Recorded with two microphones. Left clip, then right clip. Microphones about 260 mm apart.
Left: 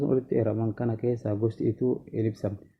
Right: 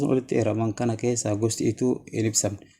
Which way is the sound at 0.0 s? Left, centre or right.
Right.